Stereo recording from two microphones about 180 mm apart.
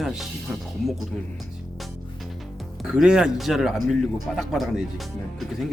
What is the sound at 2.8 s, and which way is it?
A man's voice, 5° right (ahead or behind).